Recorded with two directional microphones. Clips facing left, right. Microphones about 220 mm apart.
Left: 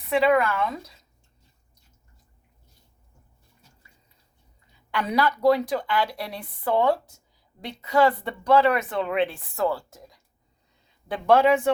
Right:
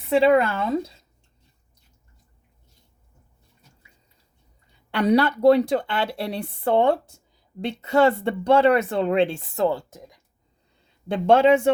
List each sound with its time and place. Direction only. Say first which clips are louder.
0.1 s speech: right 3 dB; 30° right (ahead or behind)
4.9 s speech: right 6 dB; 30° right (ahead or behind)